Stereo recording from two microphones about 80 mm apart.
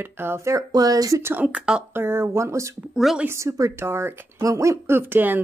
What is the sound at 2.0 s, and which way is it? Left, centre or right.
Speech, right.